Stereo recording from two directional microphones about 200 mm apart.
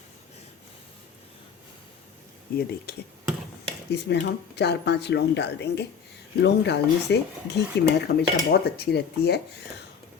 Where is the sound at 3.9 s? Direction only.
55° left (ahead or behind).